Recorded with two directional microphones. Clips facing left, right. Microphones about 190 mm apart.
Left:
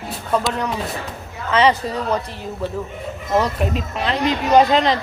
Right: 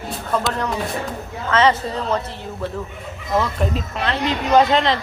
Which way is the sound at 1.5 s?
15° left (ahead or behind).